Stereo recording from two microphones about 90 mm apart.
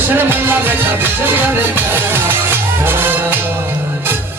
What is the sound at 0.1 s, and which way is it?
Music, 20° right (ahead or behind).